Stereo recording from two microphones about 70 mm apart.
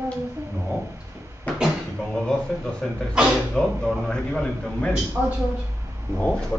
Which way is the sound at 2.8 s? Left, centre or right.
Centre.